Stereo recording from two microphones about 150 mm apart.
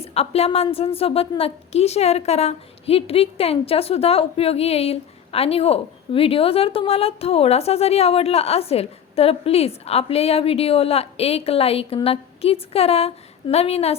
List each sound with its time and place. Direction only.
0.0 s a woman's voice: 45° left (ahead or behind)